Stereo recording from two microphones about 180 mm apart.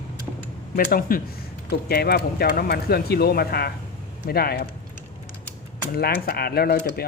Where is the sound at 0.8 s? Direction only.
50° left (ahead or behind).